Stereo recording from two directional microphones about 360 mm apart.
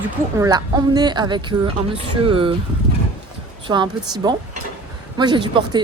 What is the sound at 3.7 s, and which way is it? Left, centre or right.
Speech, centre.